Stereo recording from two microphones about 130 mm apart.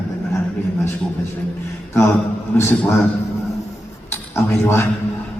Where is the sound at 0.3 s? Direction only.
20° left (ahead or behind).